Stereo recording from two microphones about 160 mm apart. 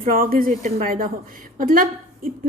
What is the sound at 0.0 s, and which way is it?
A woman's voice, 60° right (ahead or behind).